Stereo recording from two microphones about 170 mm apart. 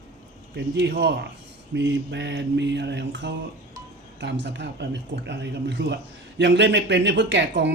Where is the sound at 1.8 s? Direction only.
90° right.